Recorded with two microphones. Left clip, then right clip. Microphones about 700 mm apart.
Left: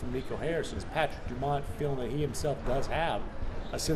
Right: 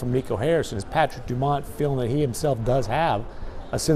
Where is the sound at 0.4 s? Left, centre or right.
Right.